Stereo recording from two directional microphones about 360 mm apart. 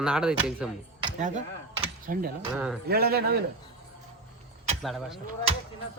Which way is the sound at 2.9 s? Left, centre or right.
Right.